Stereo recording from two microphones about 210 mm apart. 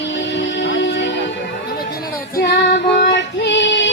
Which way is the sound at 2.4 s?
55° left (ahead or behind).